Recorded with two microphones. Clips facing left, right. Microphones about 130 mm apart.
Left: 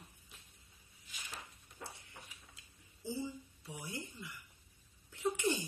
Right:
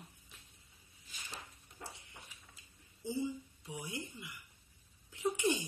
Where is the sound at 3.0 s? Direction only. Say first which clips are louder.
Right 3 dB; 15° right (ahead or behind).